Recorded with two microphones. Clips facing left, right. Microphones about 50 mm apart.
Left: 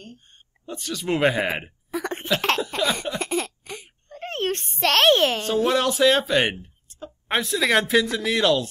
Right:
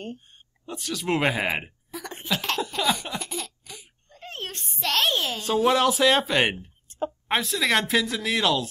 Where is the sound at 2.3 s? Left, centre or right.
Left.